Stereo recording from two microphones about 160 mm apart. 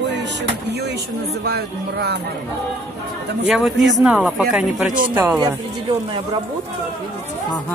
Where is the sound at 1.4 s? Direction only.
90° right.